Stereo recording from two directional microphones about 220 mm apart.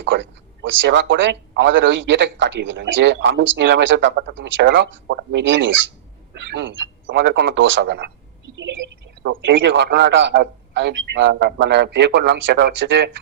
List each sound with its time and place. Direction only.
0.0 s speech: 55° right (ahead or behind)